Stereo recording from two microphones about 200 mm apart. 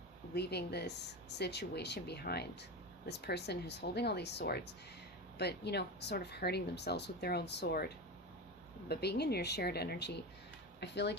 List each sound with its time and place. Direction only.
0.3 s speech: 55° left (ahead or behind)